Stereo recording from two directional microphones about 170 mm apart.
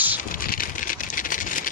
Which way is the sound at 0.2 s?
55° left (ahead or behind).